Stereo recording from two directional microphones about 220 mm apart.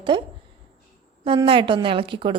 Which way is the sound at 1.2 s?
25° right (ahead or behind).